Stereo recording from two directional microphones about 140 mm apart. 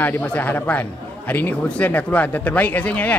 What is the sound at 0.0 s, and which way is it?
A man's voice, 15° left (ahead or behind).